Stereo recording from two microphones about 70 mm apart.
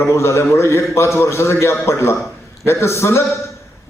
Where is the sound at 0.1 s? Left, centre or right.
Left.